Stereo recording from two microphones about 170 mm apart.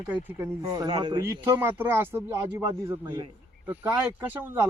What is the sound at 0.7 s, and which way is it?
Speech, 25° right (ahead or behind).